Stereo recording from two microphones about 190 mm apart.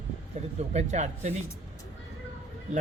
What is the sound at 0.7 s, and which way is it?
Speech, 35° right (ahead or behind).